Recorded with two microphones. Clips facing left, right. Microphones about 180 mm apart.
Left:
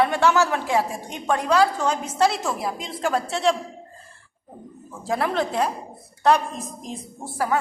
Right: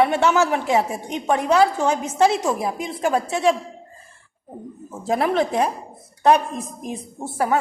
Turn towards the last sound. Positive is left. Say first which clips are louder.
# right 3 dB
turn(degrees=-25)  # may be behind; listen again after turning